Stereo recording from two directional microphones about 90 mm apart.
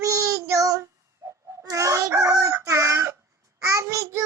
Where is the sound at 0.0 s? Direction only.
35° right (ahead or behind).